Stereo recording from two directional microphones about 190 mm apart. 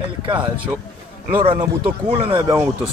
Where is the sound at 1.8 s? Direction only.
30° right (ahead or behind).